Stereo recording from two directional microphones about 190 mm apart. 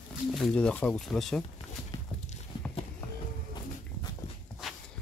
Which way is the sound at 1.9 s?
25° left (ahead or behind).